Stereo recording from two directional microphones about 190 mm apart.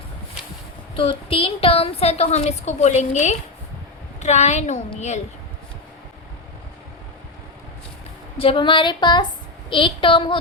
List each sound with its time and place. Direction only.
0.9 s a woman's voice: 30° left (ahead or behind)
8.4 s speech: 30° left (ahead or behind)